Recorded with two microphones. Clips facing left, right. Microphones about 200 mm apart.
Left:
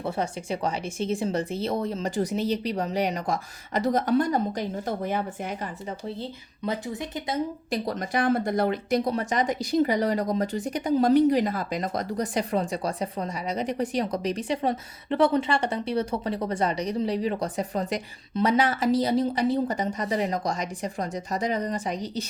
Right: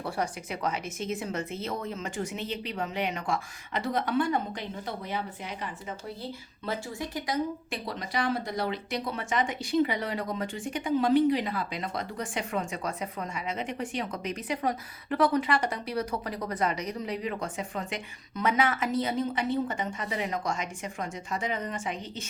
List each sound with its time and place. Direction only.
0.0 s speech: 30° left (ahead or behind); by 5.2 s 50° left (ahead or behind)
6.7 s speech: 20° left (ahead or behind)
7.7 s speech: 45° left (ahead or behind)